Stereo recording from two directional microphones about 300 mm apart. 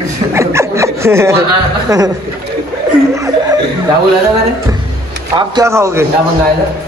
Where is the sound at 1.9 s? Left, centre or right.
Centre.